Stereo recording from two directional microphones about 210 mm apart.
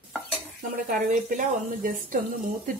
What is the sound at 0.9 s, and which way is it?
A woman's voice, 40° right (ahead or behind).